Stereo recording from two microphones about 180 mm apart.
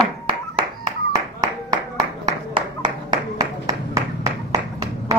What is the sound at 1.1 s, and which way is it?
Clapping, 25° right (ahead or behind).